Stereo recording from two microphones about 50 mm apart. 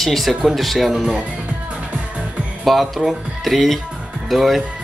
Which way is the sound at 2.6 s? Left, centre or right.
Centre.